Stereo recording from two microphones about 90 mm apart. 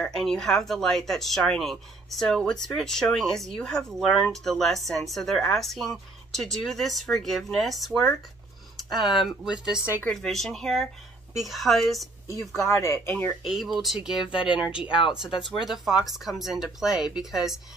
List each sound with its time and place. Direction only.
0.0 s speech: 5° left (ahead or behind)
9.0 s speech: 5° right (ahead or behind)
10.0 s speech: 5° left (ahead or behind)
12.8 s speech: 25° left (ahead or behind)
13.4 s speech: centre (ahead or behind)
14.3 s speech: 65° left (ahead or behind)
14.6 s speech: 10° right (ahead or behind)
14.9 s speech: 70° left (ahead or behind)
15.6 s speech: 5° right (ahead or behind)